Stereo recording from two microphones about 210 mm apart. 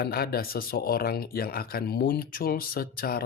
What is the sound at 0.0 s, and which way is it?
Speech, 50° left (ahead or behind).